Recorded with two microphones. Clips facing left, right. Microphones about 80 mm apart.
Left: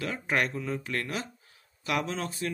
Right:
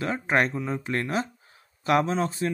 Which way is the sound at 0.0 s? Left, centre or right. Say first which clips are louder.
Right 5 dB; right.